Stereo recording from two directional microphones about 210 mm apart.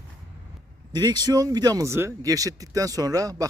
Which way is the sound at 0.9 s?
20° right (ahead or behind).